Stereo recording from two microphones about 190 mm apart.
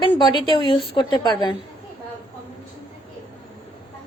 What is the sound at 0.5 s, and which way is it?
A woman's voice, 25° left (ahead or behind).